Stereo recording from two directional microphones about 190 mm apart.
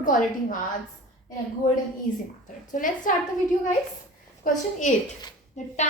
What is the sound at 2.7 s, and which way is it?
Speech, 45° left (ahead or behind).